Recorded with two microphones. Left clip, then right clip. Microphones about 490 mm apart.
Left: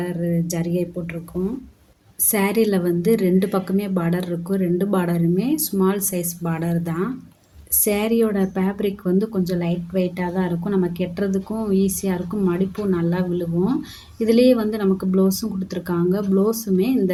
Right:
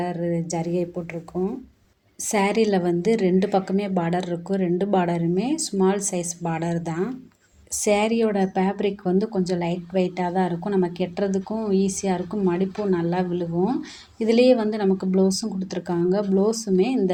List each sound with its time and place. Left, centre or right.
0.0 s speech: left
2.3 s a woman's voice: left